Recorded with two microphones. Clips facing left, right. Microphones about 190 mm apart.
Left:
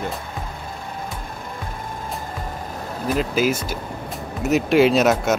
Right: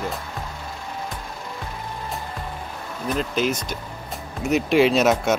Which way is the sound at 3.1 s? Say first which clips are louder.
Left 3 dB; 5° left (ahead or behind).